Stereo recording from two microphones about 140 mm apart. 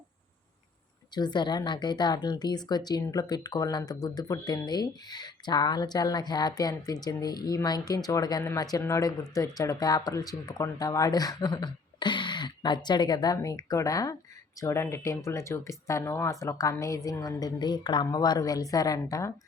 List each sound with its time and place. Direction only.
1.1 s speech: 30° left (ahead or behind)